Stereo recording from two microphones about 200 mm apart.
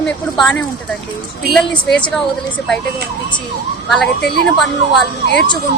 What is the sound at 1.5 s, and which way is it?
Speech, 5° left (ahead or behind).